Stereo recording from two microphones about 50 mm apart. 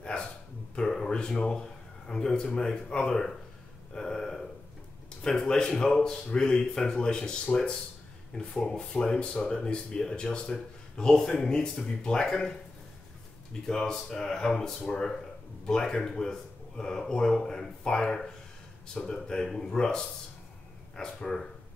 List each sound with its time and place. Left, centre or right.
0.7 s a man's voice: centre
3.9 s burping: centre
5.2 s speech: centre
8.4 s speech: centre